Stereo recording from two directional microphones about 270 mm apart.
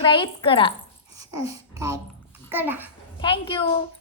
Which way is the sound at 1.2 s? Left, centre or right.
Centre.